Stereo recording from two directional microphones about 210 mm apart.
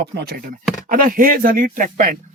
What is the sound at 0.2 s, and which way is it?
Speech, 50° right (ahead or behind).